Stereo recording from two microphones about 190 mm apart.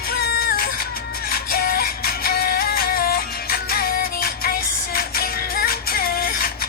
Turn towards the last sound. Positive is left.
turn(degrees=50)  # may be behind; listen again after turning